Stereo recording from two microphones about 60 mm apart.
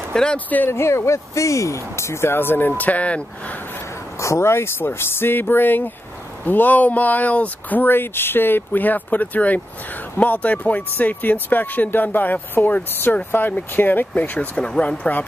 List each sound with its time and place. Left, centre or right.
0.1 s speech: centre
0.7 s speech: left
2.8 s speech: left
4.2 s speech: left
14.6 s speech: centre